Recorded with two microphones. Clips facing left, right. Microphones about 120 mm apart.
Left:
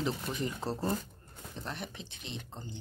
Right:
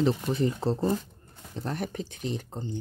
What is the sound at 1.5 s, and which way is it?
Speech, 40° right (ahead or behind).